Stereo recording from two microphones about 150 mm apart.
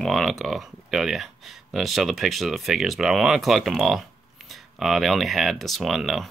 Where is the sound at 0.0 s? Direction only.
Centre (ahead or behind).